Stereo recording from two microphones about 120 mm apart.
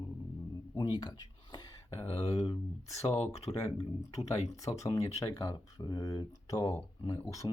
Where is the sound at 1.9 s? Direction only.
55° left (ahead or behind).